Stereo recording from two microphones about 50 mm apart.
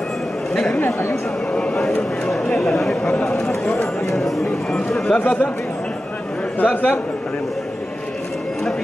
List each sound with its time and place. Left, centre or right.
1.5 s speech: left
2.6 s speech: centre
3.0 s speech: left
5.2 s a man's voice: left
6.6 s a man's voice: left